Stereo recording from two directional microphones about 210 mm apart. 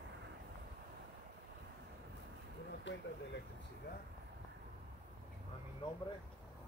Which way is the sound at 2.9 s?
60° left (ahead or behind).